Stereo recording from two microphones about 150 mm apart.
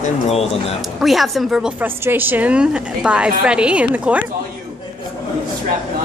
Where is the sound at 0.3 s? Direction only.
45° left (ahead or behind).